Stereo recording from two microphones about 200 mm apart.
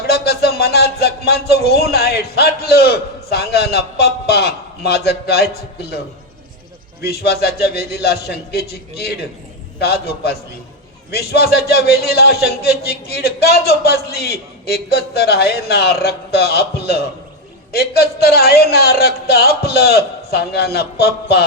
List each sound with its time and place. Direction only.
0.1 s speech: 55° left (ahead or behind)
7.0 s a man's voice: 50° left (ahead or behind)